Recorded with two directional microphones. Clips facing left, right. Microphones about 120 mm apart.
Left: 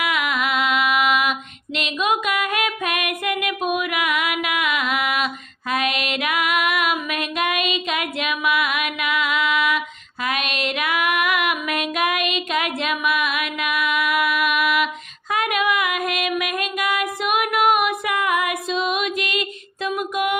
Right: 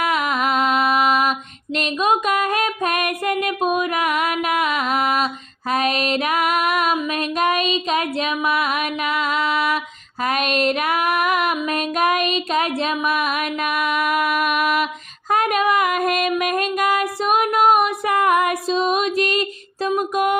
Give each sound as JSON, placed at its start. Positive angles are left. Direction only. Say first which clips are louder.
{"t": 0.0, "sound": "music", "louder": "right 3 dB", "side_deg": -40}
{"t": 5.7, "sound": "female singing", "louder": "right 3 dB", "side_deg": -40}
{"t": 7.1, "sound": "music", "louder": "right 4 dB", "side_deg": -35}
{"t": 10.2, "sound": "child singing", "louder": "right 5 dB", "side_deg": -40}
{"t": 15.3, "sound": "female singing", "louder": "right 3 dB", "side_deg": -40}
{"t": 16.4, "sound": "music", "louder": "right 5 dB", "side_deg": -40}
{"t": 19.9, "sound": "a sound", "louder": "right 3 dB", "side_deg": -35}